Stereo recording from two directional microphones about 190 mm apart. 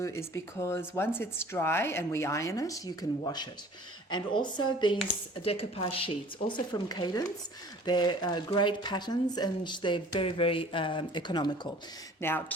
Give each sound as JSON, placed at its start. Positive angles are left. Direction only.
{"t": 0.0, "sound": "speech", "side_deg": 15}
{"t": 12.2, "sound": "speech", "side_deg": 10}